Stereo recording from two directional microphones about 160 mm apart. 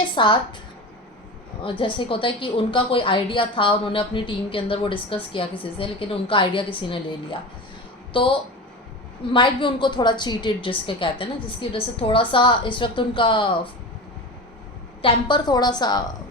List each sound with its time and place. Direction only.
0.1 s a woman's voice: 30° left (ahead or behind)
1.8 s a woman's voice: 35° left (ahead or behind)
15.0 s a woman's voice: 30° left (ahead or behind)